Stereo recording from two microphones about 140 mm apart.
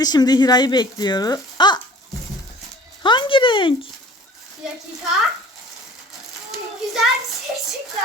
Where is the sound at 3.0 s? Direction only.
35° left (ahead or behind).